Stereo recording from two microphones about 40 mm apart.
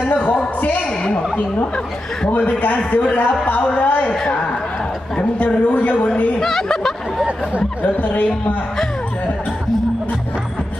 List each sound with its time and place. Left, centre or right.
0.1 s a man's voice: left
5.4 s speech: left
6.4 s speech: centre
7.8 s speech: left